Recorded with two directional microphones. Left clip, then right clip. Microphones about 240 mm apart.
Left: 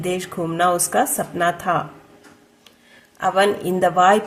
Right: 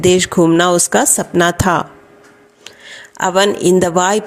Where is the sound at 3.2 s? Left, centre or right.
Right.